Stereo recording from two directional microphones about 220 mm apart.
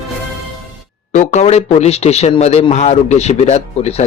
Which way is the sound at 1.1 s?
35° left (ahead or behind).